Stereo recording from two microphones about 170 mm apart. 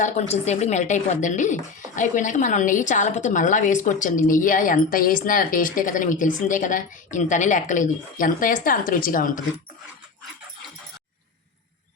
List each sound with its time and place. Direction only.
0.0 s a woman's voice: 40° left (ahead or behind)